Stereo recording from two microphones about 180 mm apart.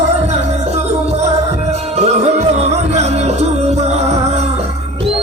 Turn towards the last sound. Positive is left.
turn(degrees=-35)  # may be behind; listen again after turning